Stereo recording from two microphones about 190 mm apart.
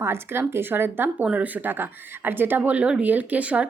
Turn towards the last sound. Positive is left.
turn(degrees=-5)  # may be behind; listen again after turning